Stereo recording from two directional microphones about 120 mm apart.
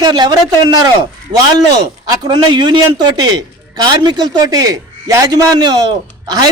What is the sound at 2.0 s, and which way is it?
A man's voice, 35° right (ahead or behind).